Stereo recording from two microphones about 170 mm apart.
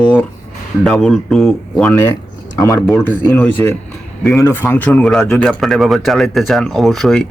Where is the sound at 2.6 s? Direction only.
20° left (ahead or behind).